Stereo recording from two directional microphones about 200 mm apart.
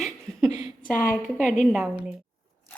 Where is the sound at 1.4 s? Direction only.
Centre (ahead or behind).